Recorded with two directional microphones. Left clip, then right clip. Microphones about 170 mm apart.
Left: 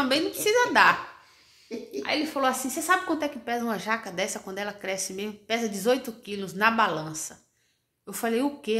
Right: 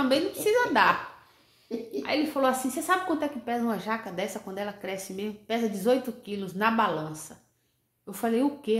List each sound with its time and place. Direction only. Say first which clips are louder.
0.0 s a woman's voice: even; 10° left (ahead or behind)
1.7 s a woman's voice: right 2 dB; 20° right (ahead or behind)
2.0 s a woman's voice: even; 5° left (ahead or behind)